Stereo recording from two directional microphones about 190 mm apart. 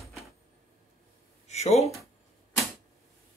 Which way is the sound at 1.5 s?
35° left (ahead or behind).